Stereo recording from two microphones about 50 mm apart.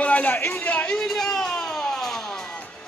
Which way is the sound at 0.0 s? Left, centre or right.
Left.